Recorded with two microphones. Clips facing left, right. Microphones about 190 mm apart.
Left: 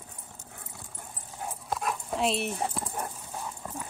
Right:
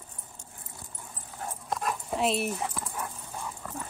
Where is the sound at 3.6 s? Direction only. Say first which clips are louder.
Even; 20° left (ahead or behind).